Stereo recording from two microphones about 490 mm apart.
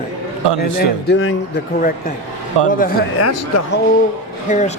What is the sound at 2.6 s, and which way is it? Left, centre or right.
Speech, right.